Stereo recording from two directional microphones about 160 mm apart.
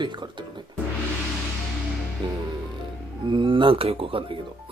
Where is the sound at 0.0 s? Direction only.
30° right (ahead or behind).